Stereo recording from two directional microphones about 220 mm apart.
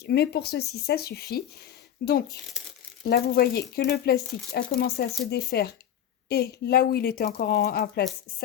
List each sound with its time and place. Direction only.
0.0 s speech: 45° left (ahead or behind)